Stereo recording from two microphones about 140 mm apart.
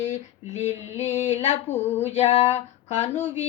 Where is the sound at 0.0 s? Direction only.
55° left (ahead or behind).